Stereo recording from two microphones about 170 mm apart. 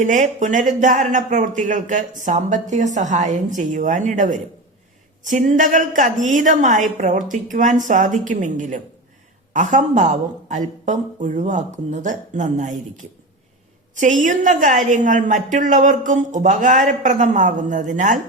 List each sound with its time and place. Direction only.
0.0 s speech: 50° right (ahead or behind)
13.9 s speech: 45° right (ahead or behind)